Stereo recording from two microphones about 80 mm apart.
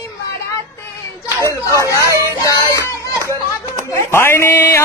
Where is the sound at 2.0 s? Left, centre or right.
Right.